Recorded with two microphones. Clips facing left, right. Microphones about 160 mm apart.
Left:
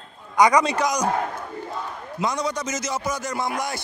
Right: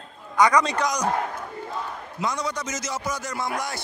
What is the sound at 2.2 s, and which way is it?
A man's voice, 20° left (ahead or behind).